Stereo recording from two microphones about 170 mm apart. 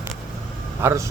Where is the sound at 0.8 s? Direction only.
15° right (ahead or behind).